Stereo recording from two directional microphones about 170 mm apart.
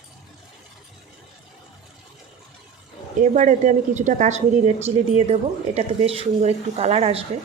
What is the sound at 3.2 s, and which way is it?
A woman's voice, 45° right (ahead or behind).